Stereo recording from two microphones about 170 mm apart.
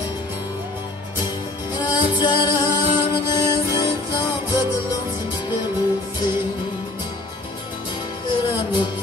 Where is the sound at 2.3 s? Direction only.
25° left (ahead or behind).